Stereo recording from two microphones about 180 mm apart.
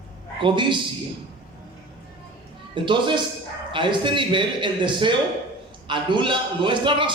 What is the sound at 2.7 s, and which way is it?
A man's voice, 25° right (ahead or behind).